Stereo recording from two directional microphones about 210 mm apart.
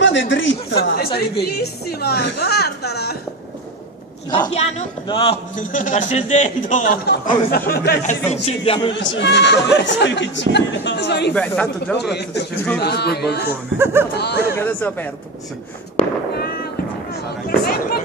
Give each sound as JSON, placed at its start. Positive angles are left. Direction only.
{"t": 0.0, "sound": "a woman's voice", "side_deg": 60}
{"t": 4.4, "sound": "a man's voice", "side_deg": 30}
{"t": 7.1, "sound": "a woman's voice", "side_deg": 50}
{"t": 8.3, "sound": "speech", "side_deg": 30}
{"t": 8.9, "sound": "speech", "side_deg": 55}
{"t": 11.3, "sound": "speech", "side_deg": 5}
{"t": 12.0, "sound": "a woman's voice", "side_deg": 50}
{"t": 13.4, "sound": "speech", "side_deg": -10}
{"t": 14.1, "sound": "a woman's voice", "side_deg": 50}
{"t": 14.6, "sound": "speech", "side_deg": 10}
{"t": 17.1, "sound": "a sound", "side_deg": 45}